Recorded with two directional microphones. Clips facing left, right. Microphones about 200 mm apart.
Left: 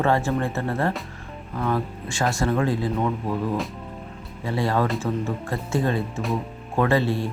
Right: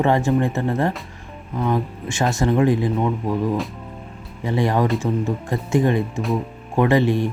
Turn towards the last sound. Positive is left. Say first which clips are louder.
# right 4 dB
turn(degrees=-20)  # may be behind; listen again after turning